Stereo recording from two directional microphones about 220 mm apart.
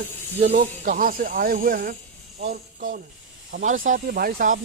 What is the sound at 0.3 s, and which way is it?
Speech, 50° right (ahead or behind).